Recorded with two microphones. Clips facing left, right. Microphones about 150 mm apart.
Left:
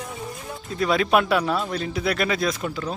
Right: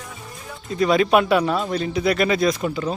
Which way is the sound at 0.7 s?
Centre (ahead or behind).